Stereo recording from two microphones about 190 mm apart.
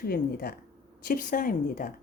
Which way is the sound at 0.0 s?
55° left (ahead or behind).